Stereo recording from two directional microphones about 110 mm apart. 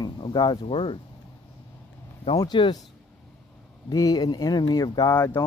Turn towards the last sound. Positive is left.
turn(degrees=35)  # may be behind; listen again after turning